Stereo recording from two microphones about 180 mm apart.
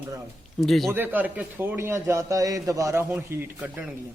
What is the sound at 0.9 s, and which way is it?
A man's voice, 10° right (ahead or behind).